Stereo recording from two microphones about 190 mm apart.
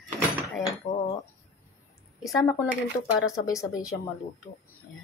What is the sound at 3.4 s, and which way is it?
Speech, 20° left (ahead or behind).